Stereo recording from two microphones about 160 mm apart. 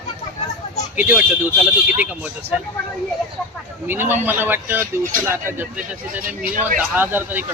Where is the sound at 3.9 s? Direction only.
10° right (ahead or behind).